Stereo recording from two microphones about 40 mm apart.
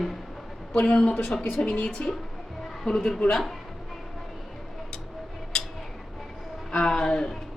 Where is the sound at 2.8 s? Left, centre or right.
Centre.